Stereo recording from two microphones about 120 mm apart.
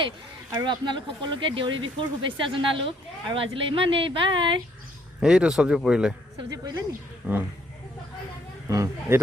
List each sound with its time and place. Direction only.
0.6 s speech: 40° right (ahead or behind)
5.2 s speech: 5° right (ahead or behind)
6.5 s speech: 30° right (ahead or behind)
7.2 s speech: 15° right (ahead or behind)
8.6 s speech: 25° right (ahead or behind)